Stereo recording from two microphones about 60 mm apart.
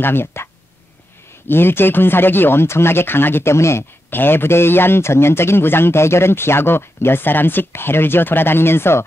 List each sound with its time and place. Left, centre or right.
0.0 s speech: left
1.5 s speech: left
4.1 s speech: left